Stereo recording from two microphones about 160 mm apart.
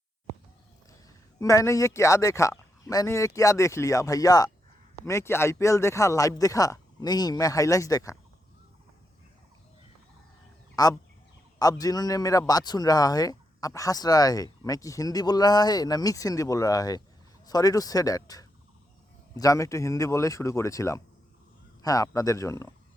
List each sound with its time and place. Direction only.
1.4 s a man's voice: 20° left (ahead or behind)
10.8 s a man's voice: 25° left (ahead or behind)